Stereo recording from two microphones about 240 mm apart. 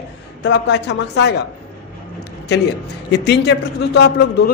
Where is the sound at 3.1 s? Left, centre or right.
Left.